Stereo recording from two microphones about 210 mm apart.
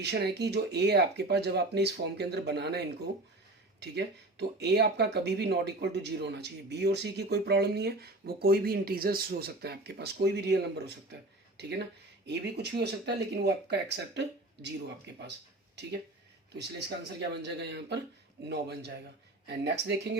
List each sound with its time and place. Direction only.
0.0 s speech: 50° right (ahead or behind)
16.6 s speech: 50° right (ahead or behind)